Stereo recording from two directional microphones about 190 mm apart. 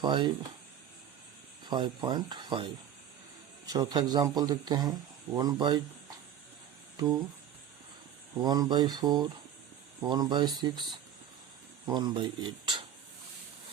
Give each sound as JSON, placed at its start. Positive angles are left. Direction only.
{"t": 0.0, "sound": "speech", "side_deg": -25}
{"t": 1.6, "sound": "speech", "side_deg": -25}
{"t": 3.7, "sound": "speech", "side_deg": -20}
{"t": 8.4, "sound": "speech", "side_deg": -20}
{"t": 11.9, "sound": "speech", "side_deg": -25}